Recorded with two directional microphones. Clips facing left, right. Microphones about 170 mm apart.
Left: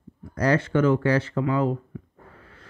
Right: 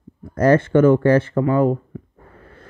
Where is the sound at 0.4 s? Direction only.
50° right (ahead or behind).